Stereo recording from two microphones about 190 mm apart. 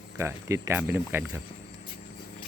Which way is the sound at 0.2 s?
15° right (ahead or behind).